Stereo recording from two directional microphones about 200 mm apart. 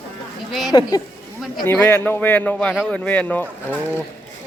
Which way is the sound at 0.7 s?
20° left (ahead or behind).